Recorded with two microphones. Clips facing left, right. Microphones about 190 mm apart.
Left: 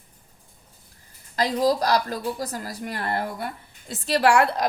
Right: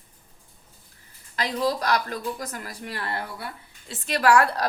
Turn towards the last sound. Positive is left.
turn(degrees=25)  # may be behind; listen again after turning